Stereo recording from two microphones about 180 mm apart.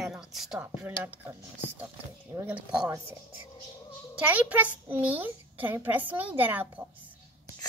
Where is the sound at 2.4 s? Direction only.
15° right (ahead or behind).